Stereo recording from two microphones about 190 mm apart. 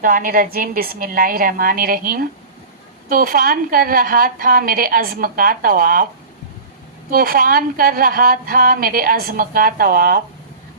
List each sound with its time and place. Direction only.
0.0 s a woman's voice: 45° right (ahead or behind)
7.1 s a woman's voice: 50° right (ahead or behind)